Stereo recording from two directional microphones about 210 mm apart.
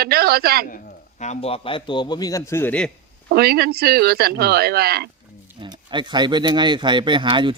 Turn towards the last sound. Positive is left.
turn(degrees=-25)  # may be behind; listen again after turning